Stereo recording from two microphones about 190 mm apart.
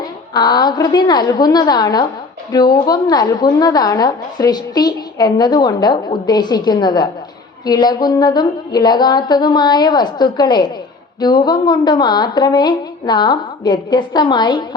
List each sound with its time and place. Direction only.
0.3 s a woman's voice: 20° left (ahead or behind)